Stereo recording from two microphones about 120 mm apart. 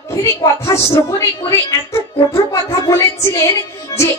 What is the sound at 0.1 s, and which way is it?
A woman's voice, 25° left (ahead or behind).